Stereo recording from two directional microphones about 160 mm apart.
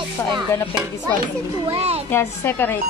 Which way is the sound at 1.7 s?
40° right (ahead or behind).